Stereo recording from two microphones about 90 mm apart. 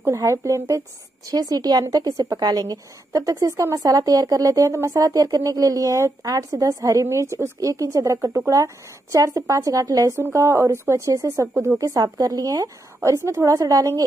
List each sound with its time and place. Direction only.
0.0 s a woman's voice: 35° right (ahead or behind)
11.8 s a woman's voice: 40° right (ahead or behind)